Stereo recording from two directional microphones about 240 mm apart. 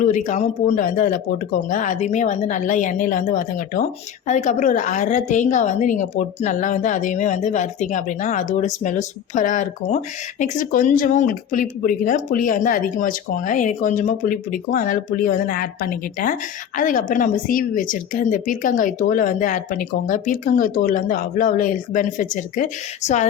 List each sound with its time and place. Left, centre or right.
0.0 s speech: left